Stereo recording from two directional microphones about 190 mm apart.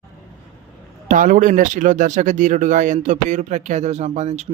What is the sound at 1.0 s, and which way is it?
Speech, 45° right (ahead or behind).